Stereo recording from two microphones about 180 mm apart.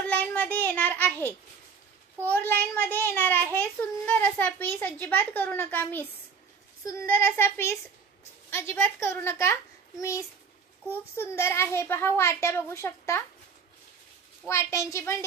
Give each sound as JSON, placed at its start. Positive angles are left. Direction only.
{"t": 0.0, "sound": "a child's voice", "side_deg": 5}
{"t": 14.5, "sound": "a child's voice", "side_deg": 15}